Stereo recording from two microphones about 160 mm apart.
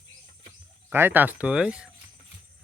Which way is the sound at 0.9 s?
10° right (ahead or behind).